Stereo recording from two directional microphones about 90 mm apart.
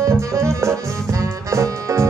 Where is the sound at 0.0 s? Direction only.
35° right (ahead or behind).